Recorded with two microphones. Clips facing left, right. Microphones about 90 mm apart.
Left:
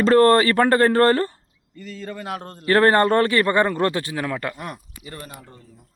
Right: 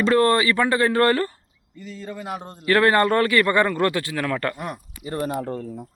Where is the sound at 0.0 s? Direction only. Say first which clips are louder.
Left 3 dB; 40° left (ahead or behind).